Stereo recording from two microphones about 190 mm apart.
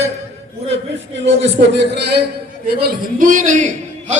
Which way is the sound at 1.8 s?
65° right (ahead or behind).